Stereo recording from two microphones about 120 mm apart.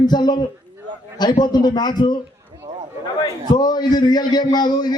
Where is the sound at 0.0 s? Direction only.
35° left (ahead or behind).